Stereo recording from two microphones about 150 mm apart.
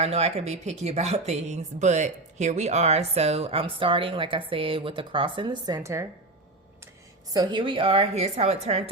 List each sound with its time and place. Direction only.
0.0 s speech: 45° right (ahead or behind); by 6.1 s 20° right (ahead or behind)
7.3 s a woman's voice: 30° right (ahead or behind)